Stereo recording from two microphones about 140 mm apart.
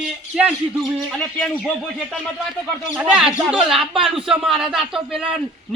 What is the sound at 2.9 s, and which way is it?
A man's voice, centre (ahead or behind).